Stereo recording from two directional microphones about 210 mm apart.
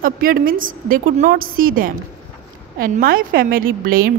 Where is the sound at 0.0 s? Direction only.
40° right (ahead or behind).